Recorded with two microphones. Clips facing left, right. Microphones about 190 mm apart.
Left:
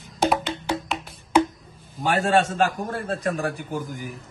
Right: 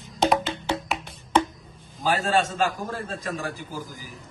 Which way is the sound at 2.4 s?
65° left (ahead or behind).